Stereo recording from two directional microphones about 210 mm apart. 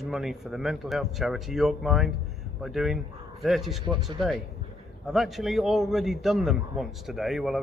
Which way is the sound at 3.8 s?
20° right (ahead or behind).